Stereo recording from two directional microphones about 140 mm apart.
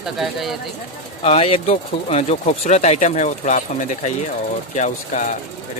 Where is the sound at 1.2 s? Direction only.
45° left (ahead or behind); by 5.3 s 60° left (ahead or behind).